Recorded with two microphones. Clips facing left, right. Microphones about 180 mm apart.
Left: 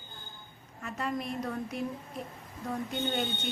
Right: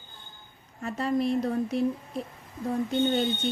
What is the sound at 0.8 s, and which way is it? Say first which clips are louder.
A woman's voice: right 8 dB; 30° right (ahead or behind).